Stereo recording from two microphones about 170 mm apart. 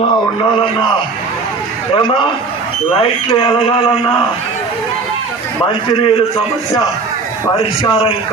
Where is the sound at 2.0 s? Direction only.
30° left (ahead or behind).